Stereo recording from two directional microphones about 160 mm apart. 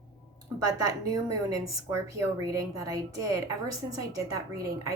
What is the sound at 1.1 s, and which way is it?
A woman's voice, 20° right (ahead or behind).